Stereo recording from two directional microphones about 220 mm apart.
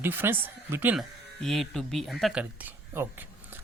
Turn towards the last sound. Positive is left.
turn(degrees=-10)  # may be behind; listen again after turning